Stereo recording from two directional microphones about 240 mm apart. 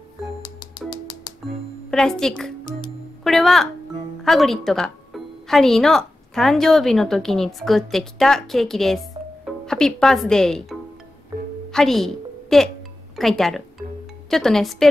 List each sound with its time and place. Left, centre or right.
0.4 s music: centre
1.9 s speech: centre
11.7 s a sound: centre
13.1 s speech: centre